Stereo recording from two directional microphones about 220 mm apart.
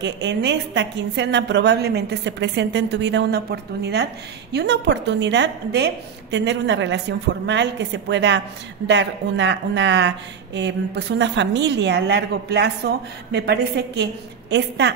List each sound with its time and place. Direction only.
0.0 s a woman's voice: 55° right (ahead or behind)